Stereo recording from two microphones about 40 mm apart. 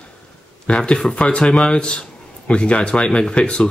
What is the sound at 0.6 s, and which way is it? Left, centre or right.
Speech, left.